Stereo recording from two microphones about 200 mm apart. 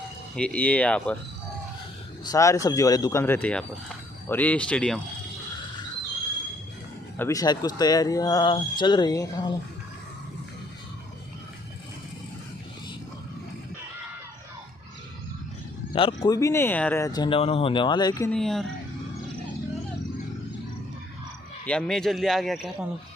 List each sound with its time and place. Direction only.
0.3 s speech: 5° left (ahead or behind)
2.2 s speech: 15° left (ahead or behind)
7.2 s speech: 15° left (ahead or behind)
15.9 s speech: 25° left (ahead or behind)
18.3 s speech: centre (ahead or behind)
21.7 s speech: 5° left (ahead or behind)